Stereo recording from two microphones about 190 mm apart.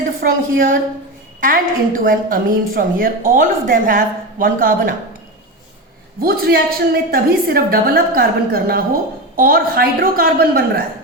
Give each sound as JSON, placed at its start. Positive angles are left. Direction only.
{"t": 0.2, "sound": "a woman's voice", "side_deg": -50}
{"t": 6.1, "sound": "a woman's voice", "side_deg": -50}